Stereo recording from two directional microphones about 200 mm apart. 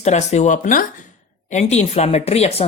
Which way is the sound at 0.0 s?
35° left (ahead or behind).